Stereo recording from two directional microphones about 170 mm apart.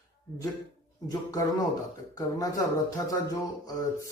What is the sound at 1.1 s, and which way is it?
Speech, 20° left (ahead or behind).